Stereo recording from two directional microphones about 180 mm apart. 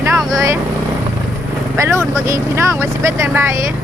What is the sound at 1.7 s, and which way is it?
Speech, 15° right (ahead or behind).